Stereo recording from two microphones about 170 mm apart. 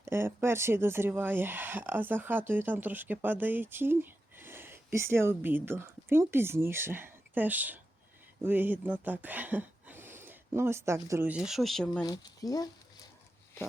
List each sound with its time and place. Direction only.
0.0 s speech: 15° right (ahead or behind); by 12.0 s centre (ahead or behind)
12.0 s speech: 25° left (ahead or behind)